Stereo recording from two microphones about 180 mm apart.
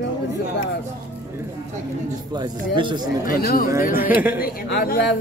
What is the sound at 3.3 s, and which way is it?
Speech, 55° left (ahead or behind).